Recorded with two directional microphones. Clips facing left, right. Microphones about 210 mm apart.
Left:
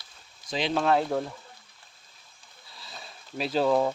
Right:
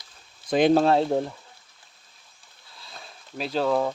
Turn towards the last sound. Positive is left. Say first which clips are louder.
# even
turn(degrees=5)  # may be behind; listen again after turning